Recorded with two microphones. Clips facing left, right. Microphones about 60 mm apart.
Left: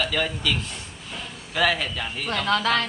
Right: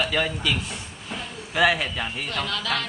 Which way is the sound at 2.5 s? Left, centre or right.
Left.